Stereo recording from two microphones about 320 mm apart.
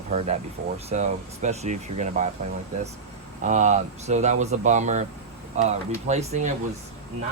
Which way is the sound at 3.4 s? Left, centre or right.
Right.